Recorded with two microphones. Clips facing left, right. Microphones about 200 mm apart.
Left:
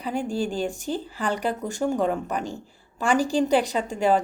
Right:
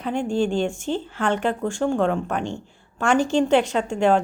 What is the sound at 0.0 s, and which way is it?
Speech, 5° left (ahead or behind).